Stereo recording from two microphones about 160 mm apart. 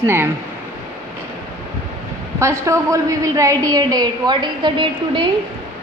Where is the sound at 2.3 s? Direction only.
20° right (ahead or behind).